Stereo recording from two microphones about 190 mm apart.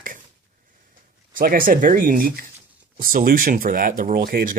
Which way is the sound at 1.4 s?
50° right (ahead or behind).